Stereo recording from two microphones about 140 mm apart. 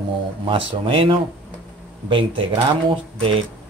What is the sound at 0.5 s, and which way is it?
Speech, 40° right (ahead or behind).